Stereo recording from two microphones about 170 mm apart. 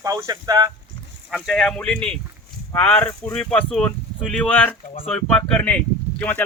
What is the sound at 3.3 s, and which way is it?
Speech, 5° left (ahead or behind).